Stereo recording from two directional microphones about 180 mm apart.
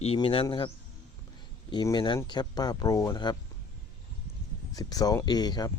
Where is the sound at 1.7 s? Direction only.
25° left (ahead or behind).